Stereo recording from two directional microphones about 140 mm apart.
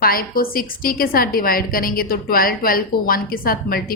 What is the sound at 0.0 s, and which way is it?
A woman's voice, 90° left.